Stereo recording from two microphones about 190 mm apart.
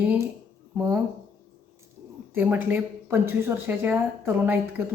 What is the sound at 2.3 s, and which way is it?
A woman's voice, 10° right (ahead or behind).